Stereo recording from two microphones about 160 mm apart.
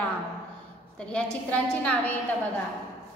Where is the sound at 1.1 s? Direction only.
5° left (ahead or behind).